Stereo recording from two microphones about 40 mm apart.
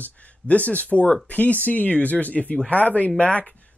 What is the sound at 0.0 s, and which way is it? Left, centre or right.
Speech, left.